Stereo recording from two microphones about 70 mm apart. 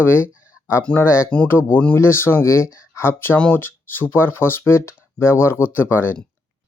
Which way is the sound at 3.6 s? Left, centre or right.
Left.